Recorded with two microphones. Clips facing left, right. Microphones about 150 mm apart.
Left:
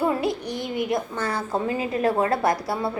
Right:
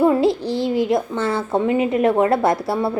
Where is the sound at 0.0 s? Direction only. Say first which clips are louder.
Right 8 dB; 25° right (ahead or behind).